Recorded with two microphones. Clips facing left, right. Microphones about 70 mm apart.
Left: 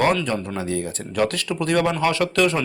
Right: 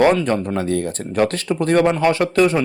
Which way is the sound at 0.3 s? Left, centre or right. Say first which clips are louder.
Right 5 dB; right.